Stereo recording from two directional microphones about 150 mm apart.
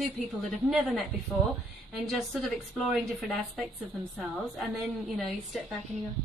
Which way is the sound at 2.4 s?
Centre (ahead or behind).